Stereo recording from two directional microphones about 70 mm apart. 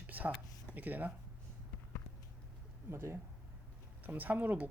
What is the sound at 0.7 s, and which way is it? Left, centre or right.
Speech, right.